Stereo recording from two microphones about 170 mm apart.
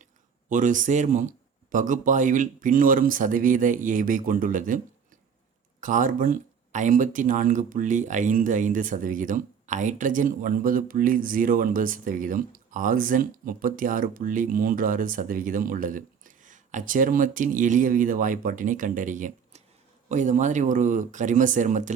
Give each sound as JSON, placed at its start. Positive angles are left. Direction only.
{"t": 0.5, "sound": "speech", "side_deg": -50}
{"t": 5.8, "sound": "speech", "side_deg": -50}